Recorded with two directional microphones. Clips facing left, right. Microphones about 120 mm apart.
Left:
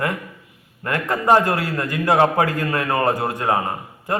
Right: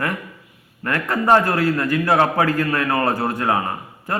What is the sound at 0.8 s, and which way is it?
A man's voice, 20° left (ahead or behind).